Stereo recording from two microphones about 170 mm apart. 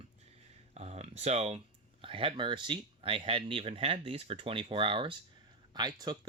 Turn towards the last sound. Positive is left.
turn(degrees=-25)  # may be behind; listen again after turning